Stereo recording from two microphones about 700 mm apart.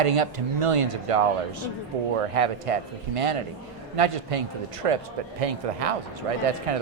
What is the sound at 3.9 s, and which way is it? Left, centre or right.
Speech, right.